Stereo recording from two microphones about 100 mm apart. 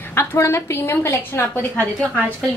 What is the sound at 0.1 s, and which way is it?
A woman's voice, 25° left (ahead or behind).